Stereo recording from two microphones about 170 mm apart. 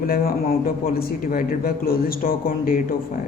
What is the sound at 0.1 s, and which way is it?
A man's voice, 60° left (ahead or behind).